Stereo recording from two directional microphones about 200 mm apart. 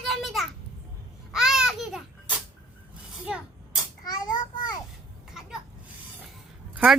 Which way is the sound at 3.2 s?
5° right (ahead or behind).